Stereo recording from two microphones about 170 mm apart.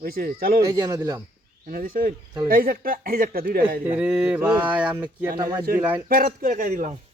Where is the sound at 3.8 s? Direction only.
10° right (ahead or behind).